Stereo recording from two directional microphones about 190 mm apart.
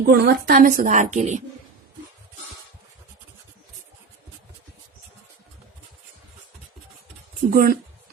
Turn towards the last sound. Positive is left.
turn(degrees=-50)  # may be behind; listen again after turning